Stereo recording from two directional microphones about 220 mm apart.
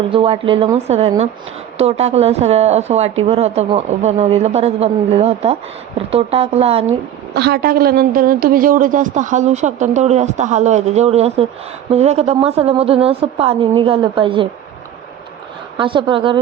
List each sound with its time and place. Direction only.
0.1 s speech: 25° right (ahead or behind)
7.3 s a woman's voice: 45° right (ahead or behind); by 14.4 s 20° right (ahead or behind)
15.8 s speech: 20° right (ahead or behind)